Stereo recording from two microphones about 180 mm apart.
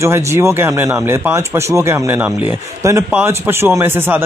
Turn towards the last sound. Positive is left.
turn(degrees=-10)  # may be behind; listen again after turning